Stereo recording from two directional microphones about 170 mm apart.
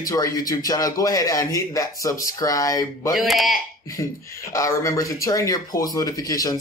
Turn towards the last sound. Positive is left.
turn(degrees=20)  # may be behind; listen again after turning